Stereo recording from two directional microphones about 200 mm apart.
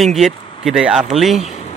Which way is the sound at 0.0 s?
Centre (ahead or behind).